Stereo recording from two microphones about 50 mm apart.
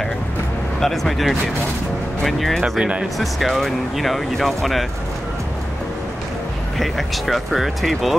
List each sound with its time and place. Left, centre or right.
0.7 s speech: centre
2.8 s speech: centre
3.2 s speech: centre
6.8 s speech: centre